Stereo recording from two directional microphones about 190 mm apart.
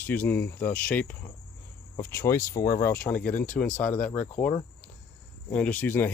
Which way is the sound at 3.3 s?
45° left (ahead or behind).